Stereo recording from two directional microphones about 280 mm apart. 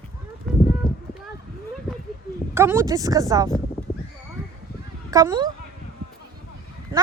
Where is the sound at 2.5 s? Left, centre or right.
Centre.